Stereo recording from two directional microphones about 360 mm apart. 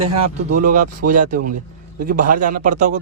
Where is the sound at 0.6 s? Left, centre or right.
Right.